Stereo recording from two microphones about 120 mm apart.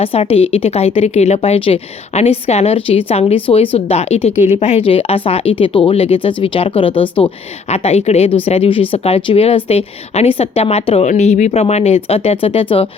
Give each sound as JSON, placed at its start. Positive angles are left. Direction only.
{"t": 0.0, "sound": "a woman's voice", "side_deg": 55}
{"t": 7.7, "sound": "speech", "side_deg": 60}